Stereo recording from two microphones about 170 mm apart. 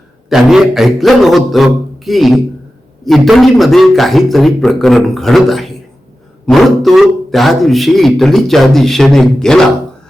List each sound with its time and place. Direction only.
0.3 s speech: 5° right (ahead or behind)